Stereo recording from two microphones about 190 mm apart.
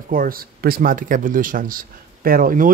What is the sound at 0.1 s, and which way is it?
A man's voice, 50° right (ahead or behind).